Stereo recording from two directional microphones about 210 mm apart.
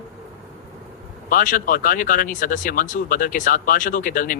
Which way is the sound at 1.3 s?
40° left (ahead or behind).